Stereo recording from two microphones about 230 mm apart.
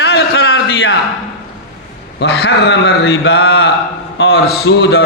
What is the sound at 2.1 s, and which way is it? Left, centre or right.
Speech, left.